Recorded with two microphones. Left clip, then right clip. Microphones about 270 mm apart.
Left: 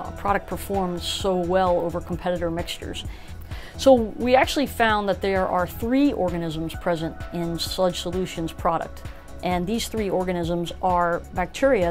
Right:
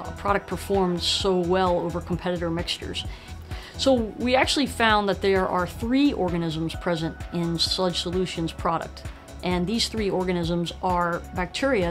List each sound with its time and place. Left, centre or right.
0.5 s speech: left
3.8 s speech: left